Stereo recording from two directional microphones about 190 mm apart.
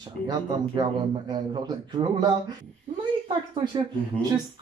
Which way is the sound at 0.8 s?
25° right (ahead or behind).